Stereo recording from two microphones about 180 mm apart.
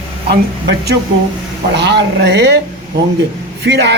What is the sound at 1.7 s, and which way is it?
Speech, 70° right (ahead or behind).